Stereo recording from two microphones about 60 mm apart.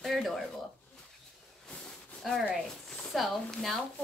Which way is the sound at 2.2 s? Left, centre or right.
Centre.